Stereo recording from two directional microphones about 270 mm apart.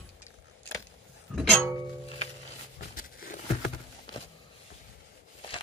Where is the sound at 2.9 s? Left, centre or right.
Left.